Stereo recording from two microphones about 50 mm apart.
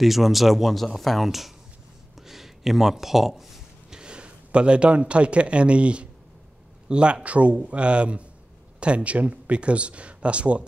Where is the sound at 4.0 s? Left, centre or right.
Right.